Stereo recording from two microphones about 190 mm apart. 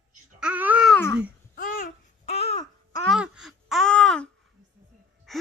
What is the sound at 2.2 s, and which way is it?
Babbling, 35° left (ahead or behind).